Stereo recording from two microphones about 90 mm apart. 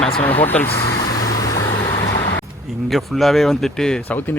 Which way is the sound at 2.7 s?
Centre (ahead or behind).